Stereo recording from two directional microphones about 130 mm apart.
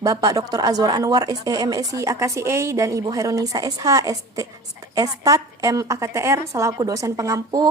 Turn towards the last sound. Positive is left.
turn(degrees=-30)  # may be behind; listen again after turning